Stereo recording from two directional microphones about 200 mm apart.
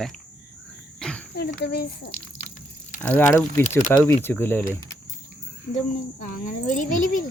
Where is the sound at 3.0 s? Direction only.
10° left (ahead or behind).